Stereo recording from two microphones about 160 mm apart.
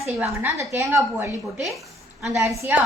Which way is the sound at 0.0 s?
10° right (ahead or behind).